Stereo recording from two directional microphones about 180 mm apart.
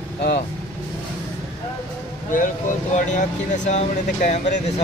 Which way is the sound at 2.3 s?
45° left (ahead or behind).